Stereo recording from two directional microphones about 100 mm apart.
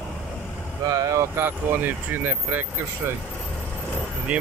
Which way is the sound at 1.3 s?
20° right (ahead or behind).